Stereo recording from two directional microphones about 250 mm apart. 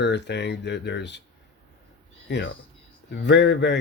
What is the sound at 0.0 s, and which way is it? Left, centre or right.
Speech, left.